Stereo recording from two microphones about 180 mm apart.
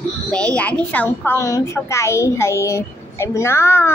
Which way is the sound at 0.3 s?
5° left (ahead or behind).